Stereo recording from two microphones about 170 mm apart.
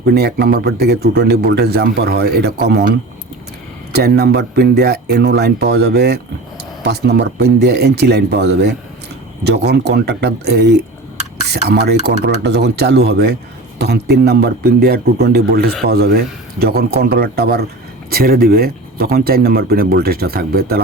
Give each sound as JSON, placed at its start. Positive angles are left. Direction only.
{"t": 0.0, "sound": "a man's voice", "side_deg": -70}
{"t": 3.9, "sound": "a man's voice", "side_deg": -75}